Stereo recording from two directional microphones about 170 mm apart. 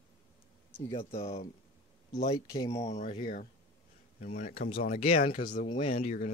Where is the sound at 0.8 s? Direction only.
35° left (ahead or behind).